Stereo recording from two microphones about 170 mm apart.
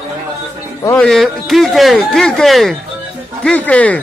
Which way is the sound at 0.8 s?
15° left (ahead or behind).